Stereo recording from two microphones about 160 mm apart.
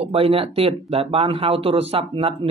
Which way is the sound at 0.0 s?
35° right (ahead or behind).